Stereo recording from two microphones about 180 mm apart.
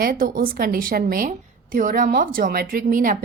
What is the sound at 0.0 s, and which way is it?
A woman's voice, 55° right (ahead or behind).